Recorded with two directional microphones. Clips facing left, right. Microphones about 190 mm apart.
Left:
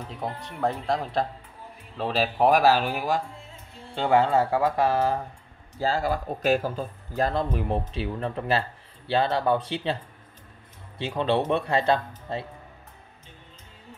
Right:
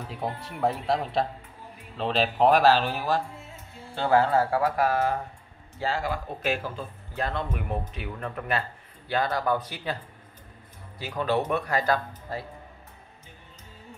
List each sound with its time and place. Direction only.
0.1 s speech: 5° right (ahead or behind); by 5.1 s 25° left (ahead or behind)
5.8 s speech: 35° left (ahead or behind)
11.0 s speech: 25° left (ahead or behind)